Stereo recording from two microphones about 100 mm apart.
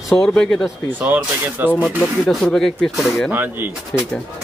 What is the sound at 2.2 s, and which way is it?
Speech, 5° left (ahead or behind).